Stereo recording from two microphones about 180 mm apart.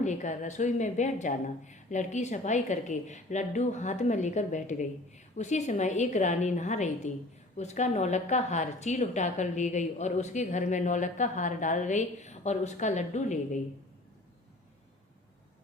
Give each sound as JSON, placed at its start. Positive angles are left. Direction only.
{"t": 0.0, "sound": "a woman's voice", "side_deg": 40}